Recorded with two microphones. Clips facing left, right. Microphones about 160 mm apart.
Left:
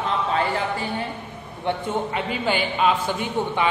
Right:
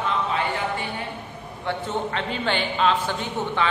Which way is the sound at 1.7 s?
10° left (ahead or behind).